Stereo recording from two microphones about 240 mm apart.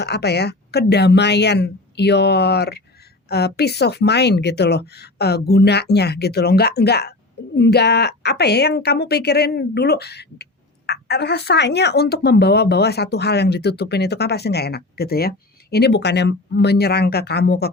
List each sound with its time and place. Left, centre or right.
0.0 s a woman's voice: left